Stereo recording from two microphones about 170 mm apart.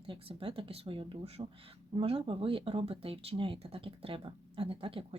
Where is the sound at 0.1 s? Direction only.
30° right (ahead or behind).